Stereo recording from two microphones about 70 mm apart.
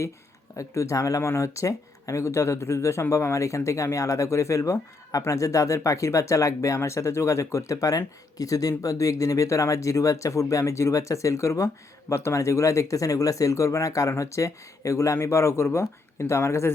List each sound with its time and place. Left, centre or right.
0.5 s speech: left